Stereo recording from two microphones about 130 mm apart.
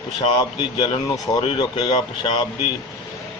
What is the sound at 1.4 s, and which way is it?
A man's voice, 40° left (ahead or behind).